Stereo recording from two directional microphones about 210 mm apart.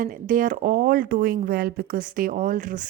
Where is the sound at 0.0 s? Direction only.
40° right (ahead or behind).